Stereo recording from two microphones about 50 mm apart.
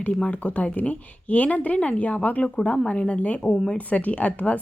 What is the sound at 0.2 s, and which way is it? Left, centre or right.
Speech, left.